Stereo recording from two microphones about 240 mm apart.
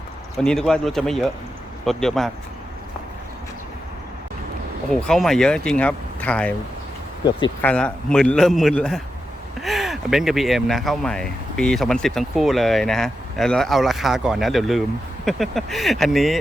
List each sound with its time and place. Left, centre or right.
0.3 s speech: centre
5.0 s speech: centre
7.3 s speech: centre
7.6 s speech: centre